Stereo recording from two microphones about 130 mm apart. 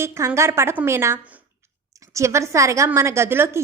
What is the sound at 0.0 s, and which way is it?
A woman's voice, 20° right (ahead or behind).